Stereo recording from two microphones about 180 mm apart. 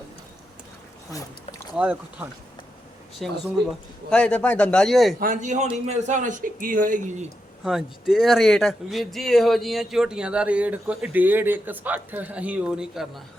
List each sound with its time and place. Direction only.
1.7 s speech: 5° right (ahead or behind)
5.2 s speech: 45° right (ahead or behind)
7.6 s speech: 5° right (ahead or behind)